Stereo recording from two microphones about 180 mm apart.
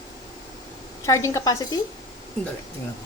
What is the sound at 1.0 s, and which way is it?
Speech, 15° left (ahead or behind).